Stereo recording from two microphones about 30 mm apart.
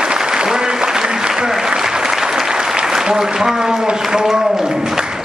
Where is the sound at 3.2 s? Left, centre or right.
Centre.